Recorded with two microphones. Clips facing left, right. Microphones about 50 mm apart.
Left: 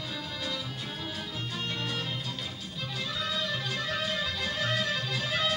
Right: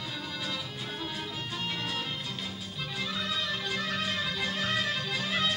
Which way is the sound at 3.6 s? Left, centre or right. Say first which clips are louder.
Even; centre.